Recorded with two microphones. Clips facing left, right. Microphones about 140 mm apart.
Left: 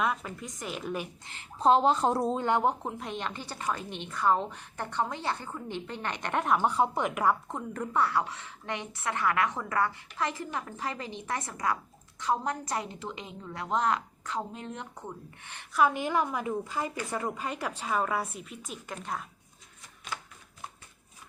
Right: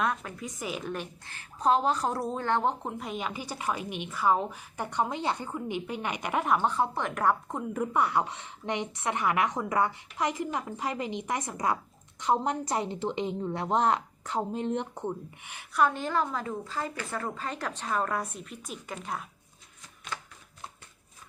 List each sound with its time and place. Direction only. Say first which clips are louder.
0.0 s a woman's voice: even; centre (ahead or behind)
1.2 s speech: left 2 dB; 20° left (ahead or behind)
2.8 s a woman's voice: right 1 dB; centre (ahead or behind)
6.7 s a woman's voice: left 2 dB; 15° left (ahead or behind); by 15.1 s 25° right (ahead or behind)
15.7 s a woman's voice: left 1 dB; 5° left (ahead or behind)